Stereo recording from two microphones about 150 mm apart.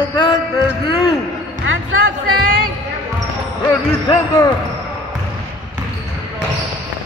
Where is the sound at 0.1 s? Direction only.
30° left (ahead or behind).